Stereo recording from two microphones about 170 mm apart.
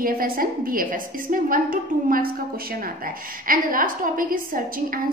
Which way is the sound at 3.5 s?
55° right (ahead or behind).